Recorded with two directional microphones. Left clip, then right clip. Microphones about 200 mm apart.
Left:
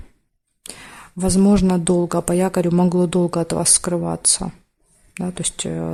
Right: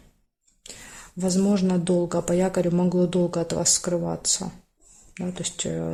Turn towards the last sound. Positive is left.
turn(degrees=30)  # may be behind; listen again after turning